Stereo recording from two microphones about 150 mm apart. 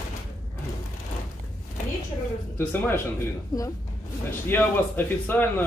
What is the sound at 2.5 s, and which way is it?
A man's voice, 15° left (ahead or behind).